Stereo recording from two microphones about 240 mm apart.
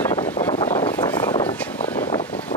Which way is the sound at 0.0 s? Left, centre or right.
Centre.